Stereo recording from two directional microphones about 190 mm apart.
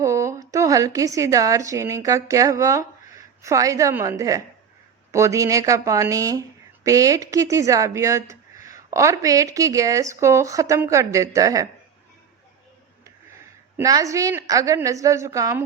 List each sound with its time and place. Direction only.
0.0 s a woman's voice: 15° right (ahead or behind)
13.7 s a woman's voice: 20° right (ahead or behind)